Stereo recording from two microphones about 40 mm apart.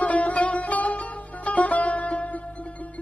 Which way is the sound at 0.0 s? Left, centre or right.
Left.